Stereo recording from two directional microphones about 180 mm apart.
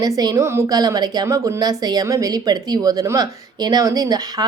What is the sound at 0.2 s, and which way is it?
A woman's voice, 20° right (ahead or behind).